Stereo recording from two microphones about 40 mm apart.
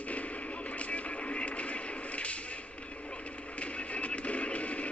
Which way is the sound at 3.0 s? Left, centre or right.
Left.